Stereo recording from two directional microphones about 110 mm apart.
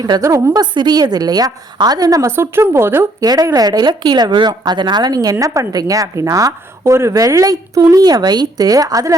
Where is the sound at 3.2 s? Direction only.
35° right (ahead or behind).